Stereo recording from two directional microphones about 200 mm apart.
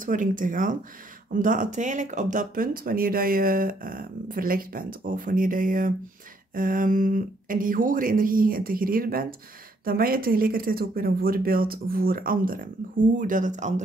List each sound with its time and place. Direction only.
0.0 s speech: 40° right (ahead or behind)